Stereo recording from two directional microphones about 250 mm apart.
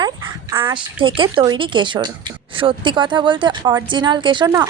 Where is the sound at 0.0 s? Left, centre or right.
Centre.